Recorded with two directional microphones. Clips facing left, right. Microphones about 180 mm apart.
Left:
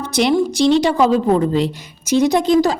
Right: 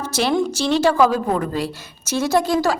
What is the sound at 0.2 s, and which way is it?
A woman's voice, 15° left (ahead or behind).